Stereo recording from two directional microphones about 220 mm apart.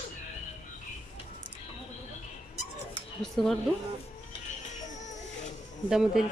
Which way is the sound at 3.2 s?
Centre (ahead or behind).